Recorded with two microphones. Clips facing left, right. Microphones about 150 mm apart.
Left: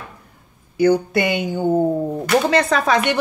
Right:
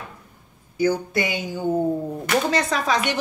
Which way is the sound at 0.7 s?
65° left (ahead or behind).